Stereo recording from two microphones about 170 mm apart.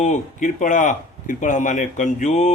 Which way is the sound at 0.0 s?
45° left (ahead or behind).